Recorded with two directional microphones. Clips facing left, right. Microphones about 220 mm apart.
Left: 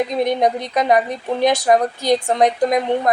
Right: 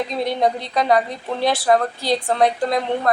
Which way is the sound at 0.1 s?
20° left (ahead or behind).